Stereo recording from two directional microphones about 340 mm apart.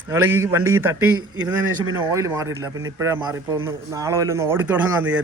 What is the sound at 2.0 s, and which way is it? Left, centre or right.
Speech, centre.